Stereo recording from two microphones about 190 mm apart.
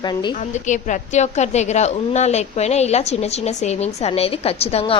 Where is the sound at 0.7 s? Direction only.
40° left (ahead or behind).